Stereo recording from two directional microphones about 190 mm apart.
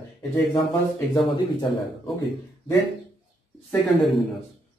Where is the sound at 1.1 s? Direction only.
25° left (ahead or behind).